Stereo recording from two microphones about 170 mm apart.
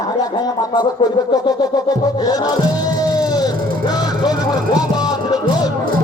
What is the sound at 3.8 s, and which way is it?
Music, 25° left (ahead or behind).